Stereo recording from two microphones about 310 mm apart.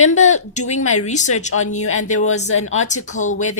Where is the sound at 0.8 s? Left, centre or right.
Left.